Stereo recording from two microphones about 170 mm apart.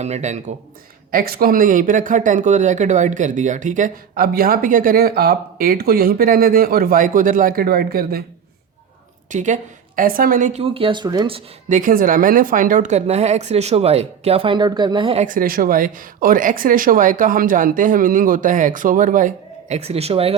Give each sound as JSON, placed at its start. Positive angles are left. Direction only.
{"t": 0.0, "sound": "speech", "side_deg": -40}
{"t": 1.1, "sound": "speech", "side_deg": -60}
{"t": 9.3, "sound": "speech", "side_deg": -45}
{"t": 11.7, "sound": "speech", "side_deg": -55}
{"t": 15.3, "sound": "speech", "side_deg": -55}